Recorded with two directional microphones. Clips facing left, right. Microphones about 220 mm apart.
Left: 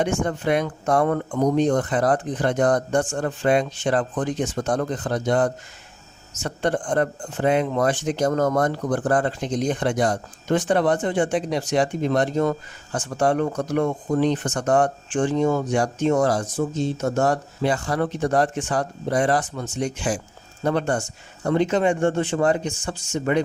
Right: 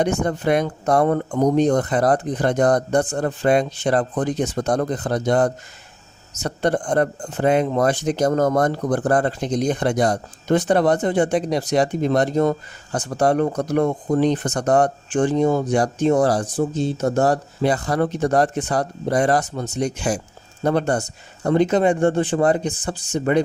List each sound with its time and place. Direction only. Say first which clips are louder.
0.0 s a man's voice: right 2 dB; 40° right (ahead or behind)